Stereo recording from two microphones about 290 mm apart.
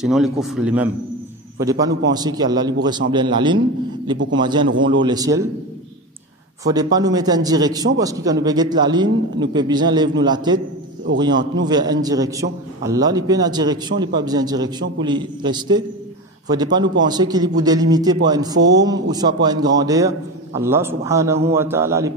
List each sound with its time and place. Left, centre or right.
0.0 s a man's voice: centre
6.6 s a man's voice: centre
11.6 s a man's voice: centre